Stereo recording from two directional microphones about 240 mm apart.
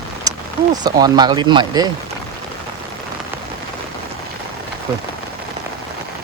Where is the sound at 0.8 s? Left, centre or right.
Centre.